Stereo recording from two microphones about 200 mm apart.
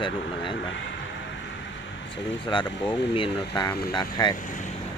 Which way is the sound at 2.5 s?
25° left (ahead or behind).